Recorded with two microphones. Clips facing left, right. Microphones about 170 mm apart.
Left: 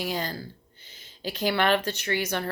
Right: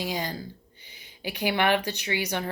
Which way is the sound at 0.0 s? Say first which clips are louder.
Even; 15° right (ahead or behind).